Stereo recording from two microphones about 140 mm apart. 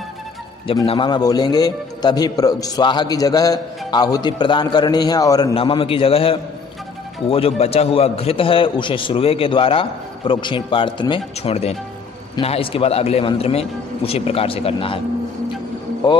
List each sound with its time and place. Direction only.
0.8 s a man's voice: 35° left (ahead or behind)
5.5 s a man's voice: 40° left (ahead or behind)